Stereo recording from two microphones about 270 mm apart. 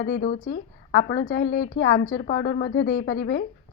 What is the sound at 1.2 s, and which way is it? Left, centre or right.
Speech, left.